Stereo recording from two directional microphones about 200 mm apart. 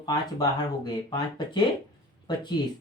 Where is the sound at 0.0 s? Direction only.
20° left (ahead or behind).